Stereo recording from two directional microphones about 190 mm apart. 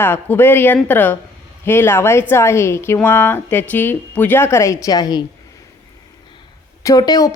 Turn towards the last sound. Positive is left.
turn(degrees=20)  # may be behind; listen again after turning